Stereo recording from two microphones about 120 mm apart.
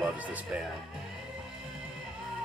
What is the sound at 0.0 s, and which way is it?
Speech, 10° right (ahead or behind).